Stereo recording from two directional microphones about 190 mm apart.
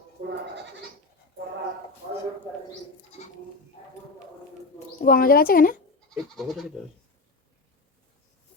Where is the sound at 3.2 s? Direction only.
40° left (ahead or behind).